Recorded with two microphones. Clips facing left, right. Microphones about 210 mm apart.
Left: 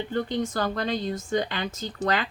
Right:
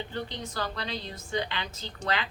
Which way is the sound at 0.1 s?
50° left (ahead or behind).